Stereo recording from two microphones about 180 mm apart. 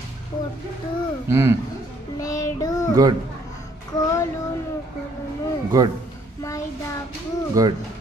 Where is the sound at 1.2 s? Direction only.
15° right (ahead or behind).